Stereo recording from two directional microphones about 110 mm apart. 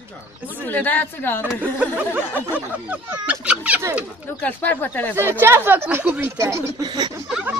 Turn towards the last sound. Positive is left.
turn(degrees=-5)  # may be behind; listen again after turning